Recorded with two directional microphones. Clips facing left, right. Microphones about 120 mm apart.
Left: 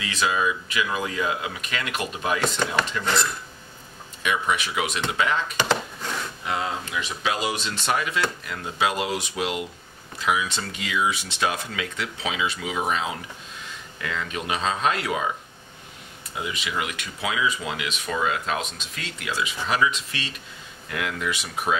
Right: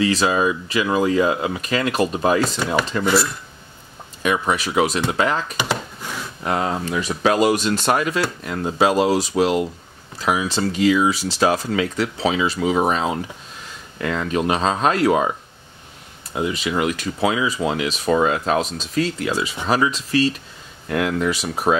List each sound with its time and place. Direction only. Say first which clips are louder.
0.0 s speech: right 7 dB; 35° right (ahead or behind)
4.2 s speech: right 4 dB; 40° right (ahead or behind)
5.6 s a sound: even; 10° right (ahead or behind)
6.4 s speech: right 8 dB; 45° right (ahead or behind)
16.3 s speech: right 8 dB; 35° right (ahead or behind)